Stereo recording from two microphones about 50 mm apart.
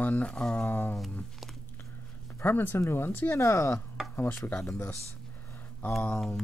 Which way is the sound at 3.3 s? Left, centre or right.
Left.